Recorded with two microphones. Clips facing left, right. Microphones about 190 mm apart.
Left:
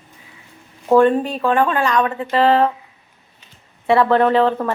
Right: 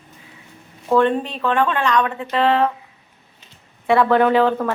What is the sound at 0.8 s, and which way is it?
A woman's voice, 10° left (ahead or behind).